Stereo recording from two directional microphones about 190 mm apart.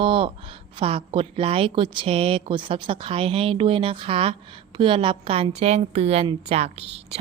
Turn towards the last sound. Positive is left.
turn(degrees=-30)  # may be behind; listen again after turning